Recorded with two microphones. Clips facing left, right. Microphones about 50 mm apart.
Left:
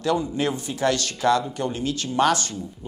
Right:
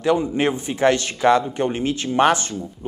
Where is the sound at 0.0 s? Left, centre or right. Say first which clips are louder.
Right 4 dB; right.